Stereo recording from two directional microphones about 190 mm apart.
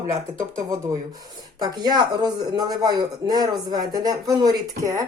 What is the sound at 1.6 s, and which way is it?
Speech, 20° right (ahead or behind).